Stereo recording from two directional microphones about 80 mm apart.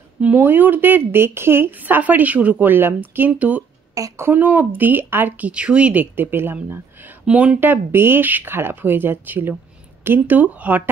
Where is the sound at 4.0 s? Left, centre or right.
Right.